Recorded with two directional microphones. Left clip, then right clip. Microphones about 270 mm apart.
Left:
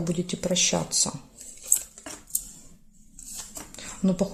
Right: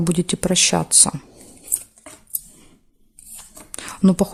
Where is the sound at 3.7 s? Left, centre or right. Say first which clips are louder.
Right 9 dB; right.